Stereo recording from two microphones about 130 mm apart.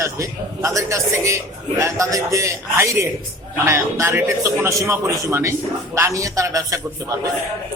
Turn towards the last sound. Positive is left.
turn(degrees=-25)  # may be behind; listen again after turning